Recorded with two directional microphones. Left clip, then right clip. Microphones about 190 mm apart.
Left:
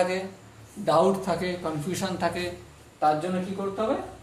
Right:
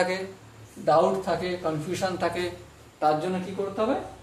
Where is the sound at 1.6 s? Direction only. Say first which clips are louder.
Right 3 dB; 5° left (ahead or behind).